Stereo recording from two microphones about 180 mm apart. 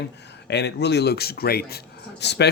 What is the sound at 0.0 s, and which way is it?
Speech, 70° left (ahead or behind).